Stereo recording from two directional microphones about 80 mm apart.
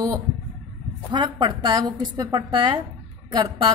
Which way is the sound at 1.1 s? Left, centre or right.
Right.